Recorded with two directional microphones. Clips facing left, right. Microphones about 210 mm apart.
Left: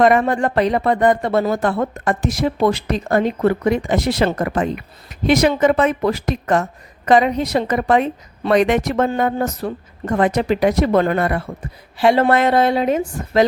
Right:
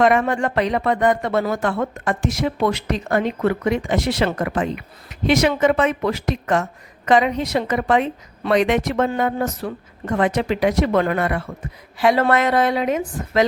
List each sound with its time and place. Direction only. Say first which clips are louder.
0.0 s a woman's voice: left 2 dB; 35° left (ahead or behind)